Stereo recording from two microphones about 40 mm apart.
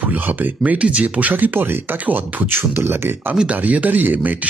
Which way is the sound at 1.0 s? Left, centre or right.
Right.